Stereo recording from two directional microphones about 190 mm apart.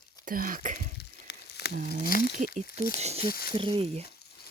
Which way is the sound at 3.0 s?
35° right (ahead or behind).